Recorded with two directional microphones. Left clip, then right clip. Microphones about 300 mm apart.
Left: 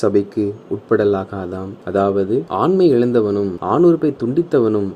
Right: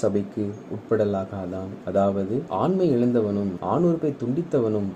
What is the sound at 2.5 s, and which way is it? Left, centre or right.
Speech, left.